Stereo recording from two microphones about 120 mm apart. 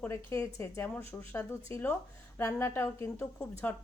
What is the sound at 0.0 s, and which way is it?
A woman's voice, 20° left (ahead or behind).